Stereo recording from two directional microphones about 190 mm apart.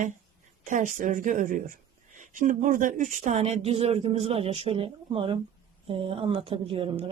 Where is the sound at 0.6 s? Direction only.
40° right (ahead or behind).